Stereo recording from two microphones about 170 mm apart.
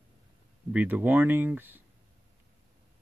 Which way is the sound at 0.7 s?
10° right (ahead or behind).